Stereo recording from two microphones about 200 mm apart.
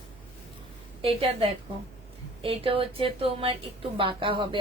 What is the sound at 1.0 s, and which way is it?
A woman's voice, 30° right (ahead or behind).